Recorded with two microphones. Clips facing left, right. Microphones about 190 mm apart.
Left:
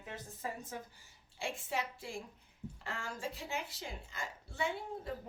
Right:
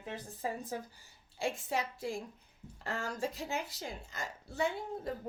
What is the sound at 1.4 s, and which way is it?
A woman's voice, 40° right (ahead or behind).